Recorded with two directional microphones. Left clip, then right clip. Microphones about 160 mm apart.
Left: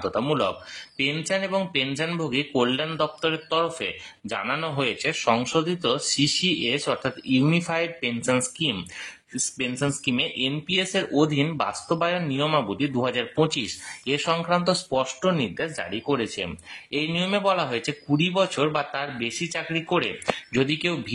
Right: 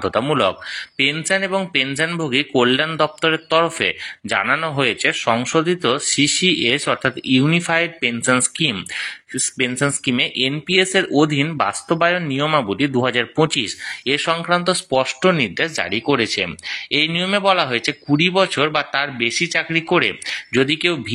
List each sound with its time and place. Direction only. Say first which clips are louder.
0.1 s speech: right 8 dB; 25° right (ahead or behind)
0.9 s speech: right 7 dB; 15° right (ahead or behind)
10.1 s speech: right 7 dB; 25° right (ahead or behind)
10.5 s speech: right 8 dB; 10° right (ahead or behind)
14.0 s speech: right 5 dB; 10° right (ahead or behind)
15.0 s speech: right 7 dB; 25° right (ahead or behind)